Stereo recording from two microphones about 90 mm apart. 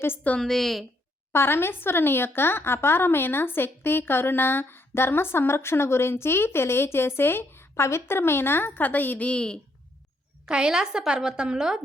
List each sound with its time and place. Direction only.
0.0 s speech: 25° left (ahead or behind)
0.3 s a woman's voice: 5° left (ahead or behind)
1.3 s speech: 25° left (ahead or behind); by 9.6 s 10° left (ahead or behind)
10.4 s a woman's voice: 10° right (ahead or behind)